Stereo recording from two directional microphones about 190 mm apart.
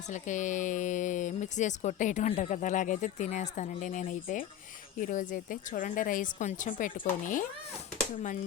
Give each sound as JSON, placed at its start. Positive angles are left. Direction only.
{"t": 0.1, "sound": "speech", "side_deg": 40}